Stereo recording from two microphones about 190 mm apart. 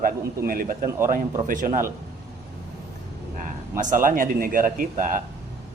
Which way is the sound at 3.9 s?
45° right (ahead or behind).